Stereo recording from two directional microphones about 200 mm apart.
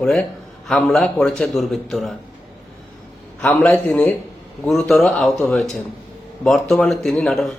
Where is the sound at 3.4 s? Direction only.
5° left (ahead or behind).